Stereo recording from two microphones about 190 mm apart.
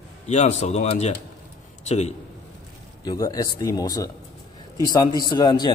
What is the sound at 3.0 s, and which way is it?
Speech, 20° left (ahead or behind).